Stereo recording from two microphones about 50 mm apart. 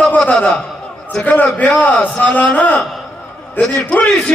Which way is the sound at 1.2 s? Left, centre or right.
Left.